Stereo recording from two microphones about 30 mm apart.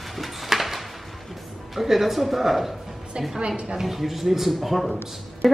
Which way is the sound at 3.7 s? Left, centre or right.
Centre.